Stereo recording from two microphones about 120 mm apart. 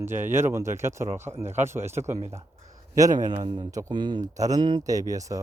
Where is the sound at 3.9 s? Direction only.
40° right (ahead or behind).